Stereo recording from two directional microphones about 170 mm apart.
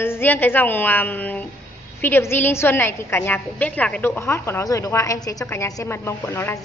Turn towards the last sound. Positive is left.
turn(degrees=15)  # may be behind; listen again after turning